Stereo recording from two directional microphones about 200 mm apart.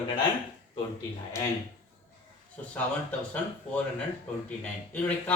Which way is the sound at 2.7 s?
5° left (ahead or behind).